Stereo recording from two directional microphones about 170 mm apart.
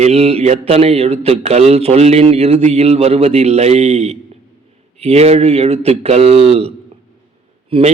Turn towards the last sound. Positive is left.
turn(degrees=-35)  # may be behind; listen again after turning